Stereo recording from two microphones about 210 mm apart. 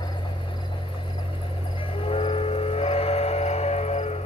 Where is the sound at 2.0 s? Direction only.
25° left (ahead or behind).